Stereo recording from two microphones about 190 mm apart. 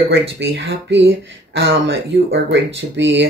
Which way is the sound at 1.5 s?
80° right.